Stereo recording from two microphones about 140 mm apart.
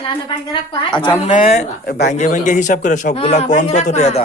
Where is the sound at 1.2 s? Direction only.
55° left (ahead or behind).